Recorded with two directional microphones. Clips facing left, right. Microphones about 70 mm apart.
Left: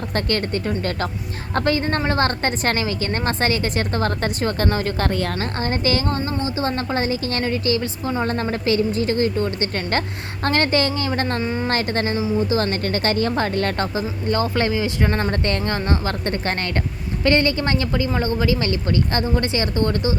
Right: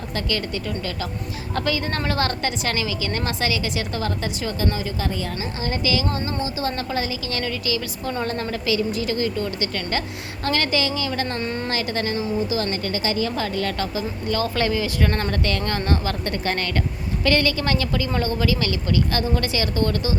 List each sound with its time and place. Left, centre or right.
0.1 s a woman's voice: left
5.6 s a woman's voice: left
8.0 s speech: left
8.3 s a woman's voice: left
11.3 s a woman's voice: centre
11.7 s a woman's voice: left
14.4 s a woman's voice: left